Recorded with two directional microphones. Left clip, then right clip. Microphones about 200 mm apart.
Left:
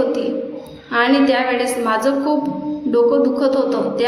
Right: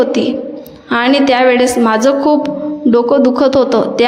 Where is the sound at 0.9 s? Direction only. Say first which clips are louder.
Right 4 dB; 45° right (ahead or behind).